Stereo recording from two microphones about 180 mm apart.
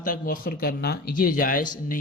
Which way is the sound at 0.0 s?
50° left (ahead or behind).